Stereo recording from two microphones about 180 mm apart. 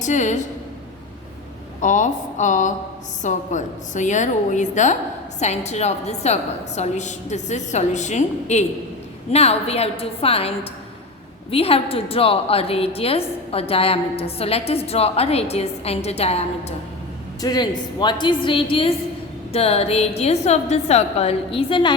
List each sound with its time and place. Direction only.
0.0 s a woman's voice: 40° left (ahead or behind)
1.8 s a woman's voice: 45° left (ahead or behind)
17.4 s a woman's voice: 25° left (ahead or behind)